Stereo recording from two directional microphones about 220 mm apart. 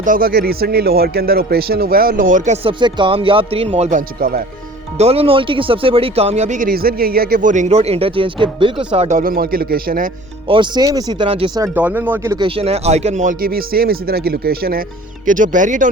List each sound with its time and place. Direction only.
0.0 s speech: 40° right (ahead or behind)
4.9 s speech: 25° right (ahead or behind)
10.5 s speech: 20° right (ahead or behind)
12.5 s speech: 25° right (ahead or behind)